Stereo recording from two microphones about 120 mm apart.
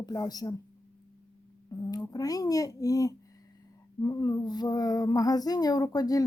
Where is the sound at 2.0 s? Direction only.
30° left (ahead or behind).